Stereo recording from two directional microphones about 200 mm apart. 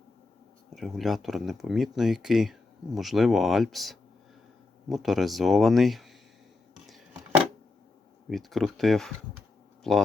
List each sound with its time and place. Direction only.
0.7 s speech: centre (ahead or behind)
6.8 s a sound: centre (ahead or behind)
8.3 s speech: centre (ahead or behind)